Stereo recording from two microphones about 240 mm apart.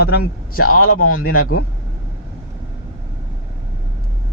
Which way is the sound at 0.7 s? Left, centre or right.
Left.